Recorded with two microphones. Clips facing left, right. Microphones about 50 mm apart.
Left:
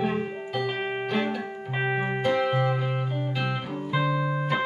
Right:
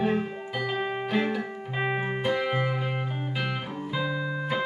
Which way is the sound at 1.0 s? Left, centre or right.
Centre.